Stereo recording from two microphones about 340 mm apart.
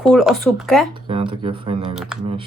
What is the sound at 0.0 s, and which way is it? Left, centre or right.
Speech, centre.